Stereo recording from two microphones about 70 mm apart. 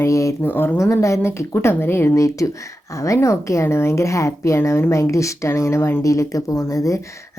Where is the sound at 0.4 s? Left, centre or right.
Left.